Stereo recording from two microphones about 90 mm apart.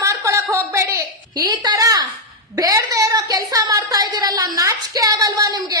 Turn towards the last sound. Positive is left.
turn(degrees=-45)  # may be behind; listen again after turning